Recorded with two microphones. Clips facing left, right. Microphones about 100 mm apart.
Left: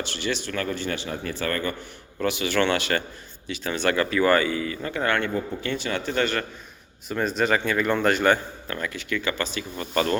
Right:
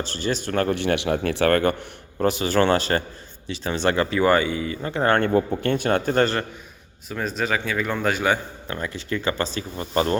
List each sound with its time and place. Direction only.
0.0 s speech: 40° right (ahead or behind); by 1.7 s 65° right (ahead or behind)
2.1 s speech: 40° right (ahead or behind)
5.6 s speech: 50° right (ahead or behind)
7.1 s speech: centre (ahead or behind)
8.6 s speech: 25° right (ahead or behind)